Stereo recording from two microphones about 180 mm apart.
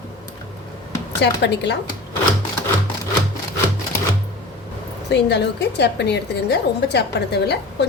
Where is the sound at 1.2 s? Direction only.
75° left (ahead or behind).